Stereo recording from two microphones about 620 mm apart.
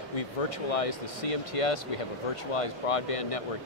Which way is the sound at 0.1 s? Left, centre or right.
Left.